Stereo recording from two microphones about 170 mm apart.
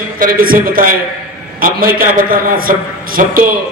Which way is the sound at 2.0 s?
55° right (ahead or behind).